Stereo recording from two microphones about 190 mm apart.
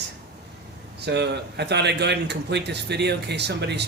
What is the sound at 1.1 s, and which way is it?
A man's voice, 60° right (ahead or behind).